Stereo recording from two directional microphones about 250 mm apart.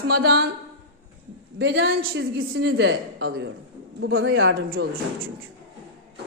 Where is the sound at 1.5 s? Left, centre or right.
Right.